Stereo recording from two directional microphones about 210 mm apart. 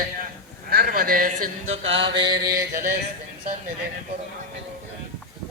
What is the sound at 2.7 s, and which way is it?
Speech, 45° right (ahead or behind).